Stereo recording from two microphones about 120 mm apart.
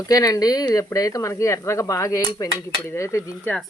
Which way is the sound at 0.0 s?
30° left (ahead or behind).